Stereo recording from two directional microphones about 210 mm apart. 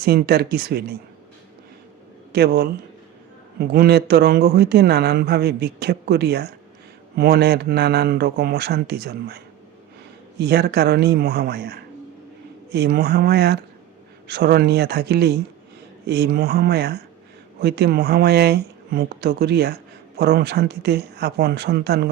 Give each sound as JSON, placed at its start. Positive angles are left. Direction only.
{"t": 0.0, "sound": "speech", "side_deg": -50}
{"t": 2.3, "sound": "speech", "side_deg": -50}